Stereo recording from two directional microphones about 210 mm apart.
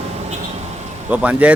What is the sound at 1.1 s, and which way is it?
Speech, 5° right (ahead or behind).